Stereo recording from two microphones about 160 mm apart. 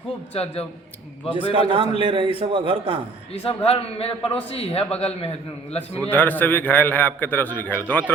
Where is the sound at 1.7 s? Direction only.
35° right (ahead or behind).